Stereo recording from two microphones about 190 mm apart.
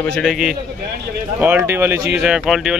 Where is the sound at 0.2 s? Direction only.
Centre (ahead or behind).